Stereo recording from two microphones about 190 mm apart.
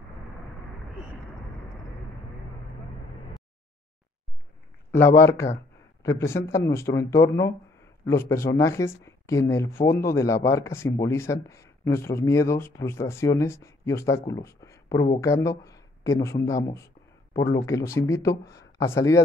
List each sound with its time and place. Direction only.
5.2 s speech: 15° left (ahead or behind)